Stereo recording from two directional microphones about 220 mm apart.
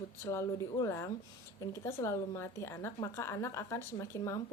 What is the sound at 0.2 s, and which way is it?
Speech, 15° left (ahead or behind).